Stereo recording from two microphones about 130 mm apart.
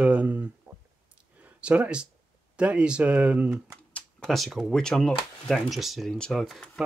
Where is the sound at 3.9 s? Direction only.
5° left (ahead or behind).